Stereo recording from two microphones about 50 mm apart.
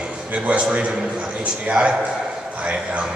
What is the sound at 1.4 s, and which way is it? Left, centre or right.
Speech, right.